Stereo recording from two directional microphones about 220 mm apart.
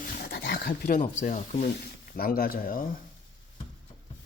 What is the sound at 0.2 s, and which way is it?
Dog, 45° left (ahead or behind).